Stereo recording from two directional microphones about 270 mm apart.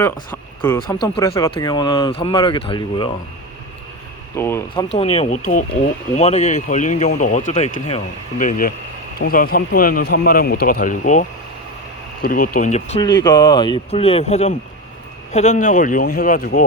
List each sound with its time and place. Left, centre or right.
0.0 s speech: centre
4.4 s a man's voice: centre; by 16.6 s left